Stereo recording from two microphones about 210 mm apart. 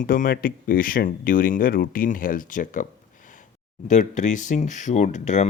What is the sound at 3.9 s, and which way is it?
Speech, 35° left (ahead or behind).